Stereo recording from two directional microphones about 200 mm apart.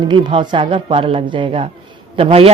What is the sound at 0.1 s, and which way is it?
A woman's voice, 25° right (ahead or behind).